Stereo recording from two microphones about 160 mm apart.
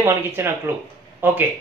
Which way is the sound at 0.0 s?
15° right (ahead or behind).